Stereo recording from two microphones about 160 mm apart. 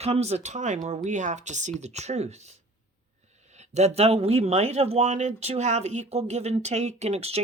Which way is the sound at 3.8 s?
40° right (ahead or behind).